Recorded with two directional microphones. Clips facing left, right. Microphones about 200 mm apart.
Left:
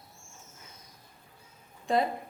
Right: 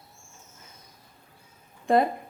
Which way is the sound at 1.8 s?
55° right (ahead or behind).